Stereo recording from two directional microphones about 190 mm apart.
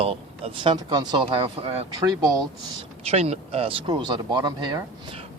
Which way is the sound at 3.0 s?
35° right (ahead or behind).